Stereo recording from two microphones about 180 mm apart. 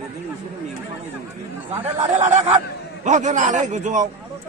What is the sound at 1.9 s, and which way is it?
A man's voice, 40° right (ahead or behind).